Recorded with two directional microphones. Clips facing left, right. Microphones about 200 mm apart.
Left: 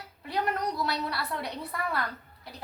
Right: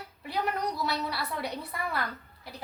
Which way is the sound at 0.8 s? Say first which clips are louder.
Even; 5° right (ahead or behind).